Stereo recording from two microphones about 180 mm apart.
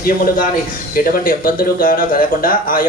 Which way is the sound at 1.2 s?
50° left (ahead or behind).